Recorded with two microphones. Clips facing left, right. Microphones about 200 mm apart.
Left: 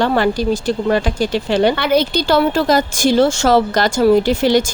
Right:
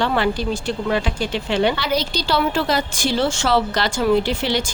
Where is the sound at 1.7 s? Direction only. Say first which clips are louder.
Left 7 dB; 55° left (ahead or behind).